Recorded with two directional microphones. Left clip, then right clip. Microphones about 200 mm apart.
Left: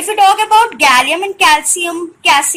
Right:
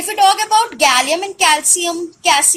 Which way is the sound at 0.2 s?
45° right (ahead or behind).